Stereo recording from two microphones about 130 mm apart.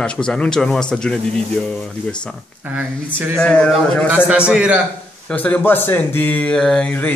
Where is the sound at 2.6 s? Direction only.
15° right (ahead or behind).